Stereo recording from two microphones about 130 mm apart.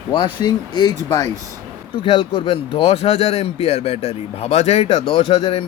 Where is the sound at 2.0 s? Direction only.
45° left (ahead or behind).